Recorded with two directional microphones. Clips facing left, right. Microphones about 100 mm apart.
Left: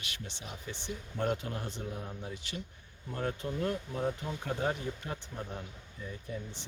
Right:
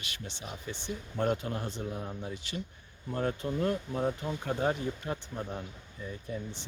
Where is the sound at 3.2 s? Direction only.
40° right (ahead or behind).